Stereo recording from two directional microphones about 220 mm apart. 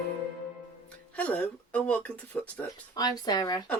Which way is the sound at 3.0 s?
15° left (ahead or behind).